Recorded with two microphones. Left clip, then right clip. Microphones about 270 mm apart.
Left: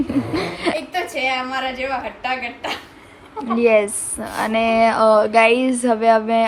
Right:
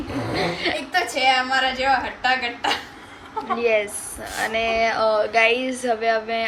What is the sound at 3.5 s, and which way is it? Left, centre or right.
Speech, centre.